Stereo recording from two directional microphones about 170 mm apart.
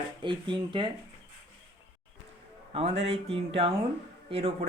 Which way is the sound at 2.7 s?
40° right (ahead or behind).